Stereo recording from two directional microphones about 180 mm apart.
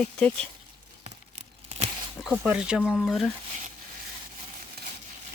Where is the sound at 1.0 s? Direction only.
40° right (ahead or behind).